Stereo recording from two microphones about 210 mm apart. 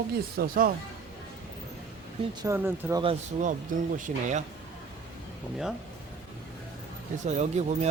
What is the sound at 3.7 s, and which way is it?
Speech, 40° right (ahead or behind).